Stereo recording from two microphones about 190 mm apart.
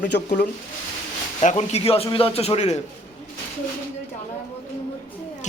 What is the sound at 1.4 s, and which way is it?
A man's voice, 35° left (ahead or behind).